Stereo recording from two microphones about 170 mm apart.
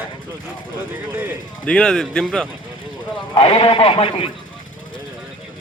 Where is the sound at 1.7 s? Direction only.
5° left (ahead or behind).